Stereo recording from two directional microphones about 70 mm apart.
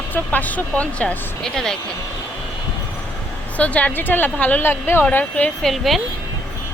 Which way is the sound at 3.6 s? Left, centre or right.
Left.